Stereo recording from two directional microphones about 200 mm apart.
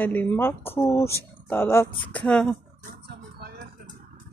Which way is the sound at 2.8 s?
50° right (ahead or behind).